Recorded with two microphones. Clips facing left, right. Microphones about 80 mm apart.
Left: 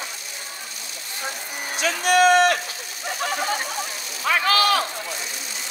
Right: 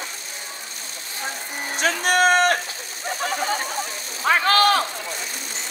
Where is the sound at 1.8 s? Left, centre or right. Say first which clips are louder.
Left 1 dB; right.